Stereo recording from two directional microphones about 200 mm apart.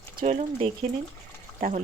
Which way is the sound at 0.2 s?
35° right (ahead or behind).